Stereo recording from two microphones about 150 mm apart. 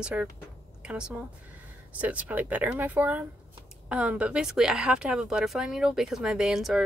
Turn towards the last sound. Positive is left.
turn(degrees=-5)  # may be behind; listen again after turning